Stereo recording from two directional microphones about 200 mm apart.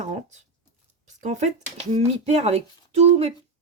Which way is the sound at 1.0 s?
35° right (ahead or behind).